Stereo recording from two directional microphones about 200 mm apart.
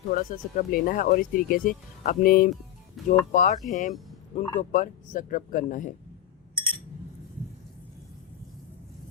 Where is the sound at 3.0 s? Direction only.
Centre (ahead or behind).